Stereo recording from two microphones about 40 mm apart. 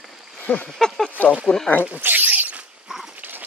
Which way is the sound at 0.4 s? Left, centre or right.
Left.